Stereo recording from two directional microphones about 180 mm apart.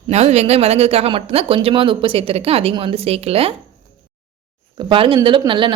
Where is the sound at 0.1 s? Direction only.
35° right (ahead or behind).